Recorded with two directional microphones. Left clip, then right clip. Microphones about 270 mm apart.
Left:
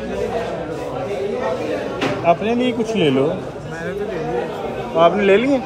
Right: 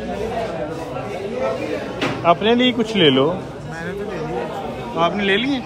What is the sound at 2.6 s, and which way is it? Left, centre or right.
Speech, right.